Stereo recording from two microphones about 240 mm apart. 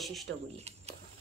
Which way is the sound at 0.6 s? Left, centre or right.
Right.